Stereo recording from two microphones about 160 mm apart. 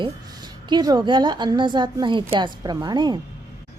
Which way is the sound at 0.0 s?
25° right (ahead or behind).